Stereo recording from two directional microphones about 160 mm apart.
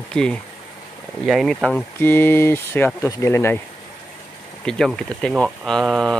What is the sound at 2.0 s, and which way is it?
Speech, 15° left (ahead or behind).